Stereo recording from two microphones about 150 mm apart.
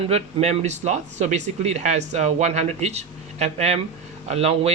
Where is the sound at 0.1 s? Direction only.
45° right (ahead or behind).